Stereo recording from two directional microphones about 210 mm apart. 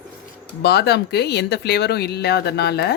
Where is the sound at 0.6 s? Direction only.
50° left (ahead or behind).